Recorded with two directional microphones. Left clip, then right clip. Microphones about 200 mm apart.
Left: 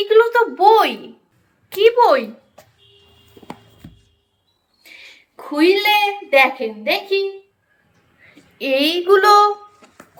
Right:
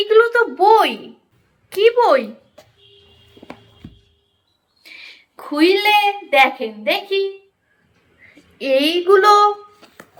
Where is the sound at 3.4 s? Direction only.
30° left (ahead or behind).